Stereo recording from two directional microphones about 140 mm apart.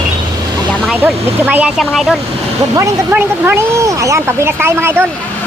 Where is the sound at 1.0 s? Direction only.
10° right (ahead or behind).